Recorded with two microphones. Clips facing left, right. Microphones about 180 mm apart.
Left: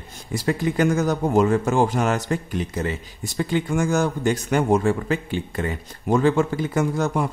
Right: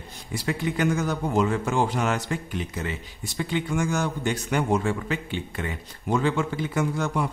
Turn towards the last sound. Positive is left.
turn(degrees=45)  # may be behind; listen again after turning